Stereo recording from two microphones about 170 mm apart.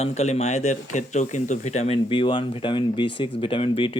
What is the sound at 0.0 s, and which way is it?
Speech, 40° left (ahead or behind).